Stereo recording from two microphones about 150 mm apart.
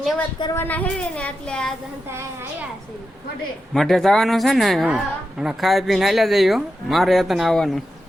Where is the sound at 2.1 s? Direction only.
15° right (ahead or behind).